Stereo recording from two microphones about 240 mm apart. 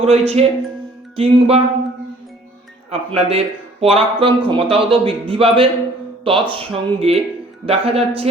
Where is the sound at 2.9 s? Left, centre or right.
Right.